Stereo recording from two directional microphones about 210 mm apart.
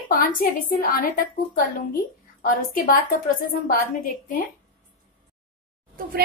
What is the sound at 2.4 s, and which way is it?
Speech, 40° left (ahead or behind).